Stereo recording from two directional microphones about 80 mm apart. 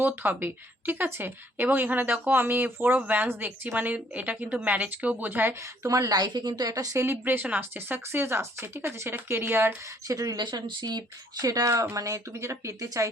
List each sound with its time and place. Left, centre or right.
0.0 s speech: right
5.5 s speech: right
7.0 s speech: right
10.1 s speech: right
10.4 s speech: right